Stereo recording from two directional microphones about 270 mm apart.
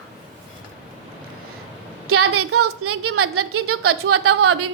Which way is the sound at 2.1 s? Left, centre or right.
Right.